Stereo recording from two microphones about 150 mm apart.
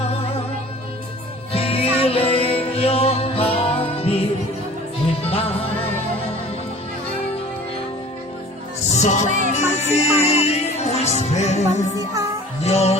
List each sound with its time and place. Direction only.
1.5 s music: 40° left (ahead or behind)
5.3 s music: 40° left (ahead or behind)
9.0 s music: 50° left (ahead or behind)